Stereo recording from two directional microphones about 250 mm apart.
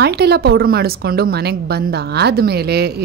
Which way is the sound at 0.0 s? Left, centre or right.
Right.